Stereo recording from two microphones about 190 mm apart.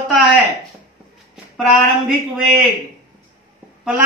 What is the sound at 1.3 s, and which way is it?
Speech, centre (ahead or behind).